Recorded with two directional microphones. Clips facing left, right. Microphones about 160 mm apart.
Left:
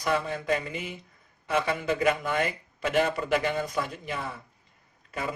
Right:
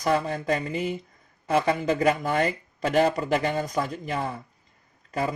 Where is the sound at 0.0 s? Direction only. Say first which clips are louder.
Right 4 dB; 40° right (ahead or behind).